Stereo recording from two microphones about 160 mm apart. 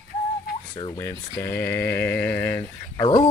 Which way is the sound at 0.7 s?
30° left (ahead or behind).